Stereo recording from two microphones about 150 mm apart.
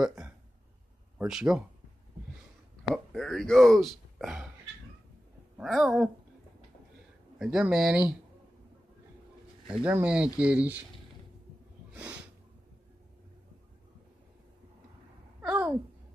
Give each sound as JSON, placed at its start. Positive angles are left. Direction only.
{"t": 0.0, "sound": "speech", "side_deg": -5}
{"t": 2.9, "sound": "speech", "side_deg": 0}
{"t": 5.6, "sound": "speech", "side_deg": 0}
{"t": 7.3, "sound": "speech", "side_deg": -5}
{"t": 9.7, "sound": "speech", "side_deg": -10}
{"t": 11.9, "sound": "a sound", "side_deg": -10}
{"t": 15.4, "sound": "a sound", "side_deg": -10}